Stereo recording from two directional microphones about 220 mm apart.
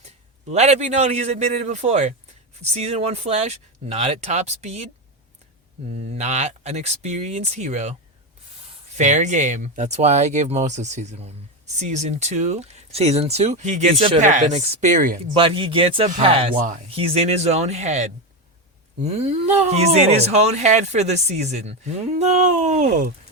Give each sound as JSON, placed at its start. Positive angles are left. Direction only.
{"t": 0.4, "sound": "speech", "side_deg": -30}
{"t": 5.9, "sound": "speech", "side_deg": -30}
{"t": 9.0, "sound": "speech", "side_deg": -35}
{"t": 15.3, "sound": "speech", "side_deg": -25}